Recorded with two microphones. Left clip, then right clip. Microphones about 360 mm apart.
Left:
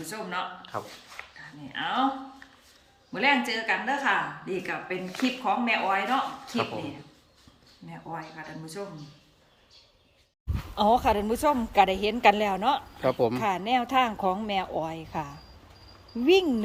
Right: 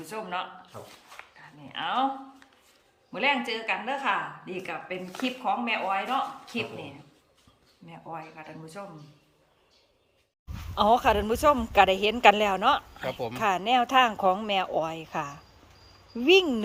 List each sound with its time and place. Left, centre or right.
0.1 s a woman's voice: centre
1.2 s dog: centre
1.6 s a woman's voice: centre
3.1 s speech: centre
7.9 s speech: centre
10.8 s a woman's voice: centre
13.1 s speech: centre
13.3 s a woman's voice: centre